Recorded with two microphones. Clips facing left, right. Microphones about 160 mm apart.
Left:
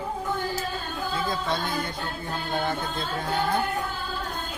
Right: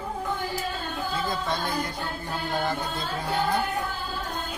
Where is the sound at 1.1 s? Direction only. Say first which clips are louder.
Left 2 dB; centre (ahead or behind).